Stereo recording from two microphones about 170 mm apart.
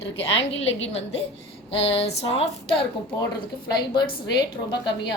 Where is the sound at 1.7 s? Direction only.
35° left (ahead or behind).